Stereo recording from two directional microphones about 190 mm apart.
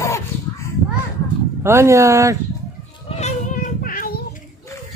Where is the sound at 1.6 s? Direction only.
15° right (ahead or behind).